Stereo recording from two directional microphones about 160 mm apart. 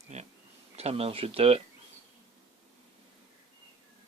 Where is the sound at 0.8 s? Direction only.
40° right (ahead or behind).